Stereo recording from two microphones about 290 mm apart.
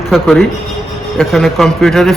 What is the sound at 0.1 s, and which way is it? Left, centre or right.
A man's voice, centre.